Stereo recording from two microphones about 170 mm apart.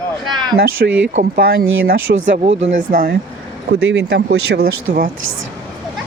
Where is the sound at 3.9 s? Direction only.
90° right; by 5.1 s 60° right (ahead or behind).